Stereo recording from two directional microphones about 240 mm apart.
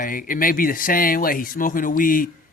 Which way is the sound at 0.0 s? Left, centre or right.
Left.